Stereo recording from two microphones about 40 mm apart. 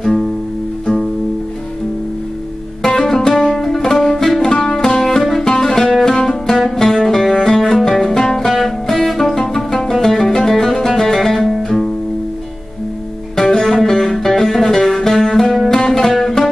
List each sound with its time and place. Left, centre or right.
0.0 s music: centre
2.8 s music: centre
4.4 s music: centre
13.4 s music: centre